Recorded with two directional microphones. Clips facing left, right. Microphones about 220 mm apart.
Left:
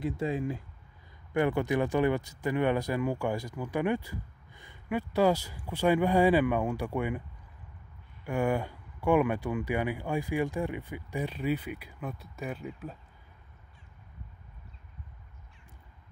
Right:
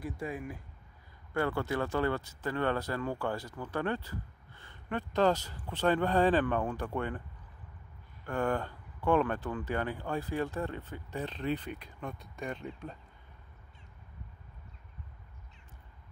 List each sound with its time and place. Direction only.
0.0 s speech: 25° left (ahead or behind); by 12.9 s 5° left (ahead or behind)